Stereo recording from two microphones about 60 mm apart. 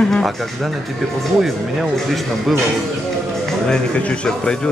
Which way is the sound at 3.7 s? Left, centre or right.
Centre.